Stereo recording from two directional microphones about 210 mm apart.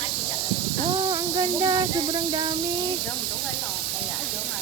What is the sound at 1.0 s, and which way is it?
Speech, 15° right (ahead or behind).